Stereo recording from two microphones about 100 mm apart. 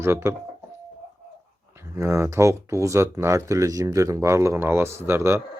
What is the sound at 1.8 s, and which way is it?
Speech, 30° right (ahead or behind).